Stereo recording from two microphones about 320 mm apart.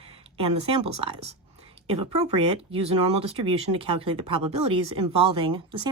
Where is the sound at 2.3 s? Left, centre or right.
Centre.